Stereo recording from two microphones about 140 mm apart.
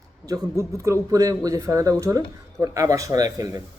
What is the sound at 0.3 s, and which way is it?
Speech, 25° right (ahead or behind).